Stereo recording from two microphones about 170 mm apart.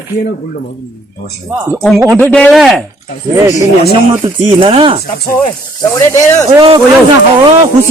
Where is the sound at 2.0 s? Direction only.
15° right (ahead or behind).